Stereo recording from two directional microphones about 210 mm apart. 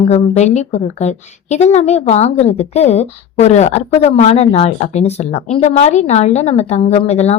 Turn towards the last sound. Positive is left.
turn(degrees=30)  # may be behind; listen again after turning